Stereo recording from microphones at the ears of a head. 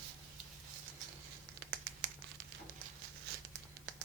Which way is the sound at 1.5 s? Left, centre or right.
Right.